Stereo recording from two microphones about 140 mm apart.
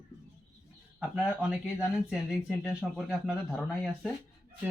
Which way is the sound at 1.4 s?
Centre (ahead or behind).